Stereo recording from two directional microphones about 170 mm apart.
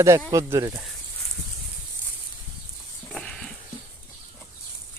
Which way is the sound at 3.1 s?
5° left (ahead or behind).